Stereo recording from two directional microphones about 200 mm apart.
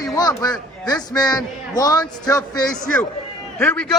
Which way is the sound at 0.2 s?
20° left (ahead or behind).